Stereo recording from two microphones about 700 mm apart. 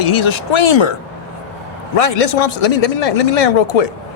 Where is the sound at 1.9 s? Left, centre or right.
Left.